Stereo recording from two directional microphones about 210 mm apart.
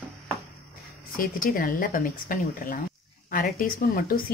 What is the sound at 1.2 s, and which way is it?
A woman's voice, 45° left (ahead or behind).